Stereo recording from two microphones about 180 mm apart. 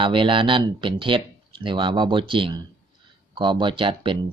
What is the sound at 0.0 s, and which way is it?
Speech, 25° right (ahead or behind).